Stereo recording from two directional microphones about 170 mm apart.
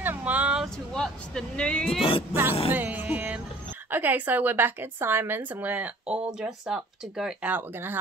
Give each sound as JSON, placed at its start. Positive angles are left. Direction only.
{"t": 0.0, "sound": "speech", "side_deg": -10}
{"t": 2.0, "sound": "music", "side_deg": 30}
{"t": 2.7, "sound": "a woman's voice", "side_deg": -10}